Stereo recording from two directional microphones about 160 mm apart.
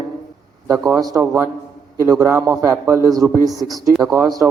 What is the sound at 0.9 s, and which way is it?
A man's voice, 25° right (ahead or behind).